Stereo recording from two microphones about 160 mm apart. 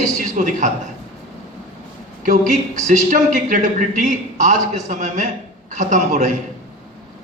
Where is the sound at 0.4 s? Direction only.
55° right (ahead or behind).